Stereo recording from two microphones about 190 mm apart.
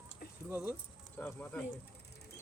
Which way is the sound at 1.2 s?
10° left (ahead or behind).